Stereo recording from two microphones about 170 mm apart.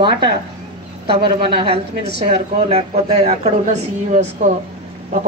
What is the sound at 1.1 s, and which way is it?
Speech, 30° right (ahead or behind).